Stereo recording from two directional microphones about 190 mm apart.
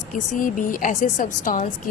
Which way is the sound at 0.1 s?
45° left (ahead or behind).